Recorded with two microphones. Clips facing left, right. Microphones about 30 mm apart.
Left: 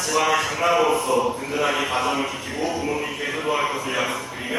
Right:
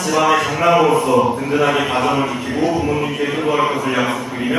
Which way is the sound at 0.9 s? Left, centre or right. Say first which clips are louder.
Right 6 dB; right.